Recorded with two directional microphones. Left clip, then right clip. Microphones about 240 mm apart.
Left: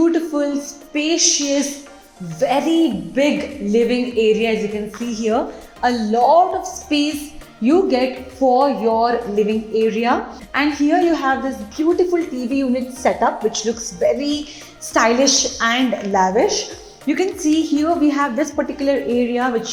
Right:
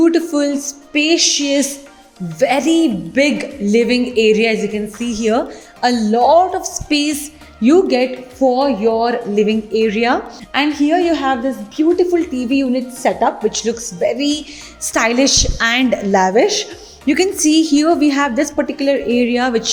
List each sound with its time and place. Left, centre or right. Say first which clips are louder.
0.0 s a woman's voice: right 3 dB; right